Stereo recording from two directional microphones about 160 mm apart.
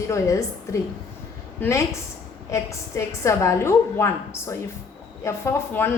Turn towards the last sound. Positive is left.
turn(degrees=15)  # may be behind; listen again after turning